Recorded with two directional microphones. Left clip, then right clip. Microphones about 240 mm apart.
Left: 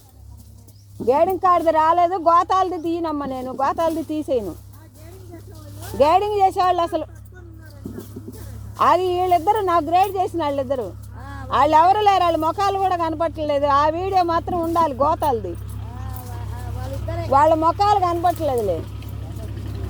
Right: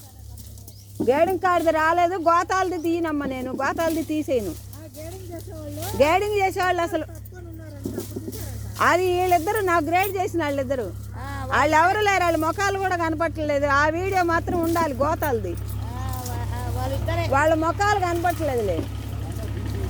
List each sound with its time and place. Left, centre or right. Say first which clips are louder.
1.0 s speech: left 3 dB; centre
6.0 s speech: left 4 dB; centre
8.8 s speech: left 3 dB; centre
11.2 s a sound: right 4 dB; right
11.5 s speech: left 4 dB; centre
16.0 s vehicle: right 5 dB; right
17.3 s speech: left 5 dB; centre